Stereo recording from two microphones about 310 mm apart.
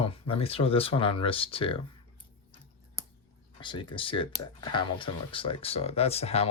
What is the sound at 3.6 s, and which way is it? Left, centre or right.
Speech, centre.